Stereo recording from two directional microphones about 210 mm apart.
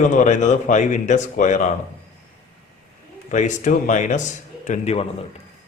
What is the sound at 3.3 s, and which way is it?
A man's voice, 35° left (ahead or behind).